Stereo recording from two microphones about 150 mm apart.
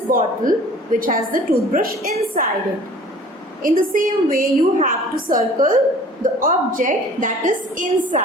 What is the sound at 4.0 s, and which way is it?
A woman's voice, 65° right (ahead or behind).